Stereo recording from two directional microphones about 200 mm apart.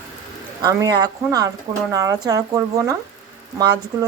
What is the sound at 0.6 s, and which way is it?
A woman's voice, 15° right (ahead or behind).